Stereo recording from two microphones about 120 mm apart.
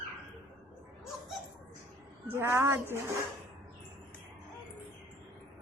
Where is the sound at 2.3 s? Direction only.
20° right (ahead or behind).